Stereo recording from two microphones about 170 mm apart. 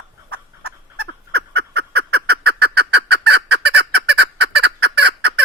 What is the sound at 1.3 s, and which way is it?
Fowl, 75° right (ahead or behind).